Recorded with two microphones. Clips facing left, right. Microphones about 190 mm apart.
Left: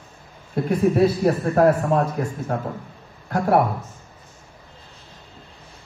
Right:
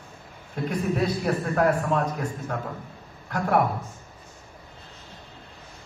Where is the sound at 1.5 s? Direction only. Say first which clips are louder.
Left 5 dB; 35° left (ahead or behind).